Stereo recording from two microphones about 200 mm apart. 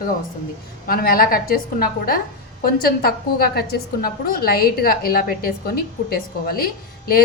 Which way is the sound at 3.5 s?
50° left (ahead or behind).